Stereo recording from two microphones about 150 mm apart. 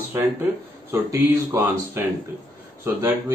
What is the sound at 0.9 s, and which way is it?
Speech, 15° right (ahead or behind).